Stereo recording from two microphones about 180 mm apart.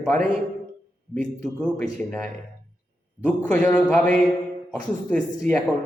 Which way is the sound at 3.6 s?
5° left (ahead or behind).